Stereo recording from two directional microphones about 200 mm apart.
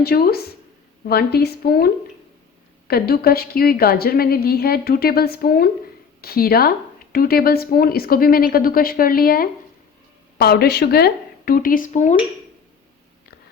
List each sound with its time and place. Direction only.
0.0 s a woman's voice: 50° left (ahead or behind)